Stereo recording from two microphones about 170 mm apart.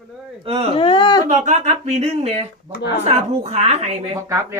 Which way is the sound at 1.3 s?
45° right (ahead or behind).